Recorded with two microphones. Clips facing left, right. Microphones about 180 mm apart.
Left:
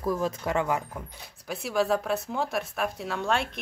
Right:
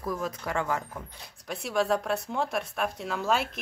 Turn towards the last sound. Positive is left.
turn(degrees=-5)  # may be behind; listen again after turning